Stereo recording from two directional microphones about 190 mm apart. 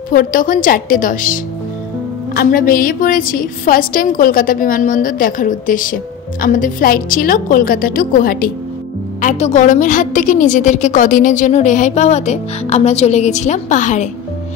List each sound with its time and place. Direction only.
0.1 s a woman's voice: 45° left (ahead or behind)
9.2 s a woman's voice: 40° left (ahead or behind)